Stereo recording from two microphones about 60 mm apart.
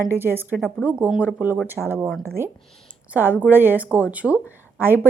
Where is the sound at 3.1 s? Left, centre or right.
Right.